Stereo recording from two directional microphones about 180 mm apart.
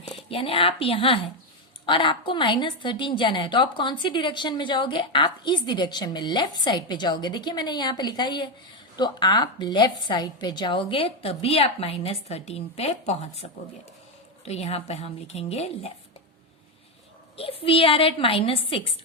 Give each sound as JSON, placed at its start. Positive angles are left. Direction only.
{"t": 0.3, "sound": "a woman's voice", "side_deg": 30}
{"t": 17.3, "sound": "a woman's voice", "side_deg": 30}